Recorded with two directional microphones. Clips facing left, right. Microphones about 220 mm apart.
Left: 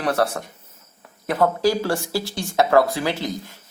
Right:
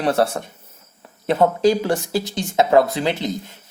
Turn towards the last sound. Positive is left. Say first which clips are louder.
# right 2 dB
turn(degrees=-20)  # may be behind; listen again after turning